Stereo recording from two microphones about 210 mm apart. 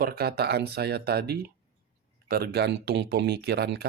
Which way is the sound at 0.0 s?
45° right (ahead or behind).